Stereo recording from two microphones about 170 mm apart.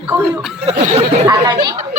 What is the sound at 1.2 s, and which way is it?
Speech, 20° right (ahead or behind).